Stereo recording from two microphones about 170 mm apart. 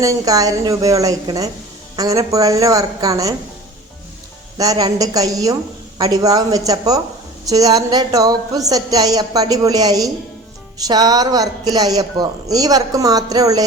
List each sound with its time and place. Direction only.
0.0 s speech: 20° right (ahead or behind)
4.5 s speech: 20° right (ahead or behind)